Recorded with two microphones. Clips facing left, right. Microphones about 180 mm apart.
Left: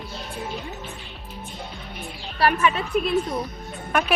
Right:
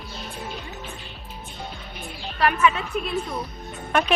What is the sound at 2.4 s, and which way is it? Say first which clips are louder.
Speech: even; 35° left (ahead or behind).